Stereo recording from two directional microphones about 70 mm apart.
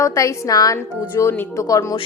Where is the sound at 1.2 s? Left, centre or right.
Left.